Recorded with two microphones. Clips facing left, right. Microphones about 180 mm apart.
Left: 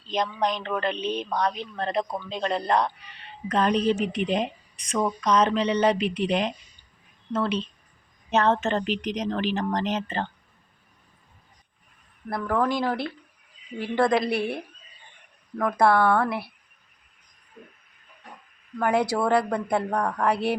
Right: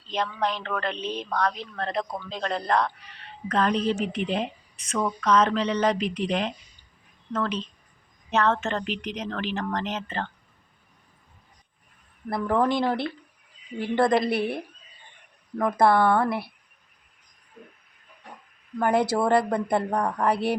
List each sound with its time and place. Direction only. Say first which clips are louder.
0.1 s a woman's voice: left 2 dB; 15° left (ahead or behind)
0.9 s speech: left 3 dB; 30° right (ahead or behind)
1.2 s a woman's voice: left 1 dB; 10° left (ahead or behind)
12.5 s speech: right 1 dB; 20° right (ahead or behind)
14.0 s a woman's voice: even; centre (ahead or behind)
15.8 s speech: even; 20° right (ahead or behind)
18.8 s a woman's voice: right 1 dB; centre (ahead or behind)
19.2 s a woman's voice: right 1 dB; 10° right (ahead or behind)
19.5 s a woman's voice: right 1 dB; centre (ahead or behind)